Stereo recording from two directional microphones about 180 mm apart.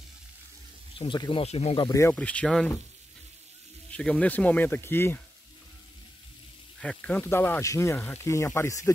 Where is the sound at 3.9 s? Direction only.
5° left (ahead or behind).